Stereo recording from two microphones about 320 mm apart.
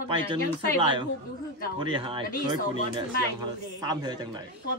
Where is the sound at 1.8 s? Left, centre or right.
Centre.